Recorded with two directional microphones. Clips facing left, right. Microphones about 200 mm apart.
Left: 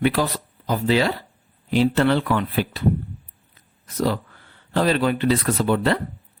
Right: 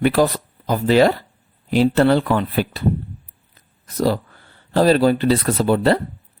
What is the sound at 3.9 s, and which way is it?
Speech, 35° right (ahead or behind).